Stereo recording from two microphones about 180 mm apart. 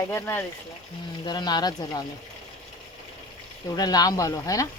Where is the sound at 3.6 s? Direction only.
20° left (ahead or behind).